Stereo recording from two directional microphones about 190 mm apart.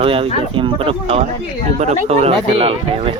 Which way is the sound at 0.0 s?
30° right (ahead or behind).